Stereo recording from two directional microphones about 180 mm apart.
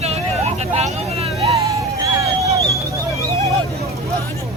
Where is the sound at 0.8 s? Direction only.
35° right (ahead or behind).